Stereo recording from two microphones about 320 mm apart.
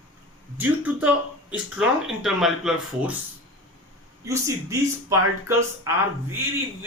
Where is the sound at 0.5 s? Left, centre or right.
Centre.